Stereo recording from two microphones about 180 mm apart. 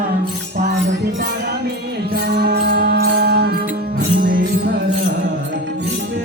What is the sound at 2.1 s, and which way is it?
Music, 65° right (ahead or behind).